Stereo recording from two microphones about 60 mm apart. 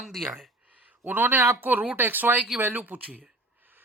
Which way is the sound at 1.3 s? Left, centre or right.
Right.